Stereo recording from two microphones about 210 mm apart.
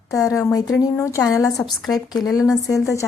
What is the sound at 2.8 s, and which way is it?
Speech, 15° left (ahead or behind).